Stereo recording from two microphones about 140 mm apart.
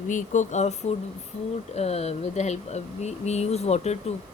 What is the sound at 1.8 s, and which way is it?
Speech, 50° left (ahead or behind).